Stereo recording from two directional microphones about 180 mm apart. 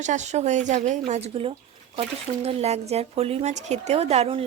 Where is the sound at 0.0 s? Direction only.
40° right (ahead or behind).